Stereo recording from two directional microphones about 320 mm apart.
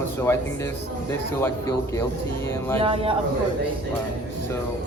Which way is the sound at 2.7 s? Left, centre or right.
Centre.